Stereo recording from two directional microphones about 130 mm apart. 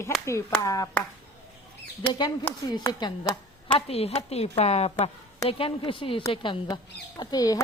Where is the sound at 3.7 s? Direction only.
50° left (ahead or behind).